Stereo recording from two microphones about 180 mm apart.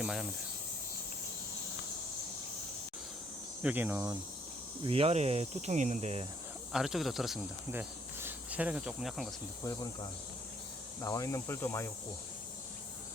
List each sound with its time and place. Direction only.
0.0 s speech: centre (ahead or behind)
3.6 s speech: 10° right (ahead or behind)
4.8 s speech: 30° right (ahead or behind)
6.7 s speech: centre (ahead or behind)
7.7 s cricket: 10° right (ahead or behind)
9.6 s speech: 20° left (ahead or behind)